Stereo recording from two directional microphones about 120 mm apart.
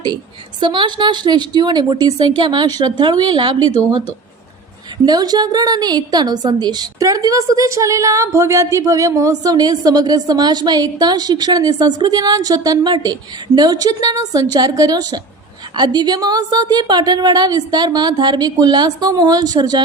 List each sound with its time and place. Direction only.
0.6 s a woman's voice: 40° right (ahead or behind)
5.0 s a woman's voice: 35° right (ahead or behind)